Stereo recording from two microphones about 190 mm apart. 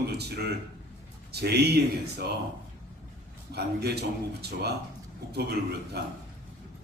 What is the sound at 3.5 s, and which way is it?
A man's voice, 60° right (ahead or behind).